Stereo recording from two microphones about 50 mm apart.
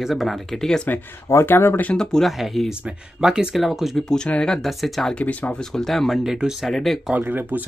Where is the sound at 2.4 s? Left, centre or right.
Centre.